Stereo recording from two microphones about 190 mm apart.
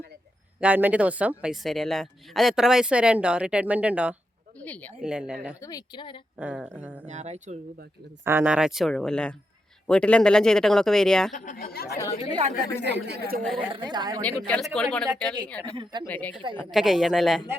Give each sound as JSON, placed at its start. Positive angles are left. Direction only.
{"t": 0.6, "sound": "a woman's voice", "side_deg": -10}
{"t": 4.6, "sound": "speech", "side_deg": 10}
{"t": 4.9, "sound": "a woman's voice", "side_deg": -5}
{"t": 5.5, "sound": "speech", "side_deg": 20}
{"t": 6.4, "sound": "speech", "side_deg": -5}
{"t": 7.1, "sound": "speech", "side_deg": -40}
{"t": 8.2, "sound": "a woman's voice", "side_deg": -10}
{"t": 11.3, "sound": "speech", "side_deg": 45}
{"t": 12.3, "sound": "speech", "side_deg": -30}
{"t": 12.9, "sound": "speech", "side_deg": -60}
{"t": 13.6, "sound": "a woman's voice", "side_deg": -25}
{"t": 14.2, "sound": "a woman's voice", "side_deg": 5}
{"t": 15.6, "sound": "a woman's voice", "side_deg": -25}
{"t": 16.0, "sound": "a woman's voice", "side_deg": 10}